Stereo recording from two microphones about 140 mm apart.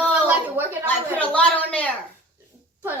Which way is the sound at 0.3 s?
15° right (ahead or behind).